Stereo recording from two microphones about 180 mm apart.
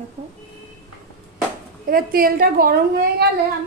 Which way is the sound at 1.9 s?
55° right (ahead or behind).